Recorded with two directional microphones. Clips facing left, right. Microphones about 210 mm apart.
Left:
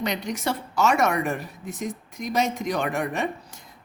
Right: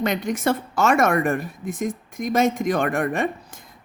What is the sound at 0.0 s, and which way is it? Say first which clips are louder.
Speech: right 5 dB; 50° right (ahead or behind).